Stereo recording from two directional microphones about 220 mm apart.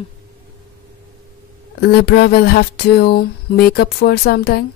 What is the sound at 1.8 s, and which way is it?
Speech, 45° left (ahead or behind).